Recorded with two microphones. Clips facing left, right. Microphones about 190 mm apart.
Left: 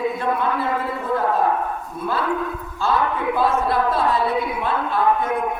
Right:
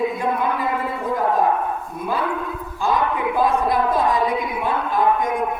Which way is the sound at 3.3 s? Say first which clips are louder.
Right 1 dB; 15° right (ahead or behind).